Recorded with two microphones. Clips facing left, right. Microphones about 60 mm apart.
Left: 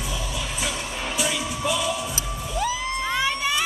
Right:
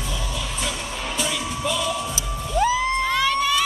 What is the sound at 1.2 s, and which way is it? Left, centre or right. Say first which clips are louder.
Music: even; centre.